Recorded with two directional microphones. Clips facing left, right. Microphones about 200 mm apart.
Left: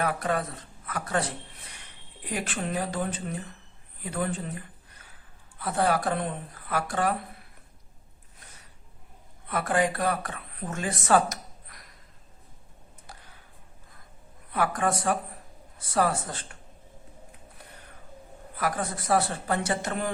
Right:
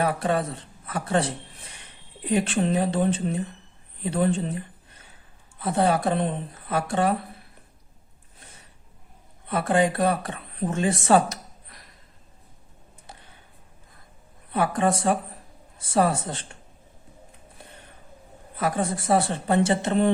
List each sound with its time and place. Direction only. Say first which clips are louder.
0.0 s speech: right 4 dB; 30° right (ahead or behind)
9.5 s speech: right 4 dB; 25° right (ahead or behind)
13.1 s a sound: right 2 dB; 25° right (ahead or behind)
14.5 s speech: right 4 dB; 25° right (ahead or behind)
18.5 s speech: right 4 dB; 25° right (ahead or behind)